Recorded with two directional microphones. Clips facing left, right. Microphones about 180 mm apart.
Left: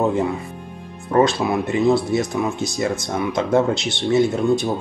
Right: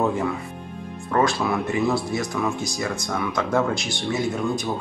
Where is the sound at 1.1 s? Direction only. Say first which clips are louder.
Left 4 dB; 20° left (ahead or behind).